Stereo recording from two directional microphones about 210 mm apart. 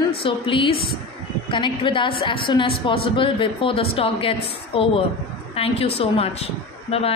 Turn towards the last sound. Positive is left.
turn(degrees=30)  # may be behind; listen again after turning